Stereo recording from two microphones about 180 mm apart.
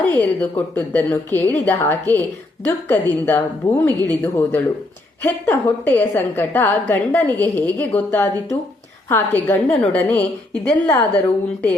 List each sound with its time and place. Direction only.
0.0 s a woman's voice: 10° left (ahead or behind)